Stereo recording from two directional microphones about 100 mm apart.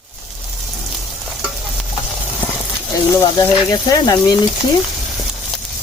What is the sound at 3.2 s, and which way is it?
Speech, 35° left (ahead or behind).